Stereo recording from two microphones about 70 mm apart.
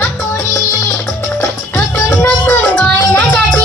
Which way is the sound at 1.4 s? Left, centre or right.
Left.